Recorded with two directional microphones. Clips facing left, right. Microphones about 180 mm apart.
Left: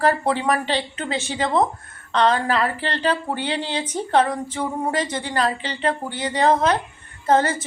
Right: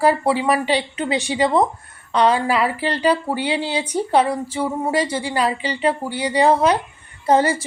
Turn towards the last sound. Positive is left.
turn(degrees=-10)  # may be behind; listen again after turning